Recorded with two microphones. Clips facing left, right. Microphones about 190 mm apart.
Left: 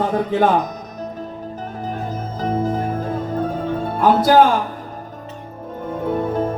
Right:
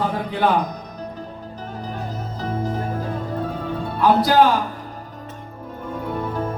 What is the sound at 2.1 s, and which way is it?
Music, 50° left (ahead or behind).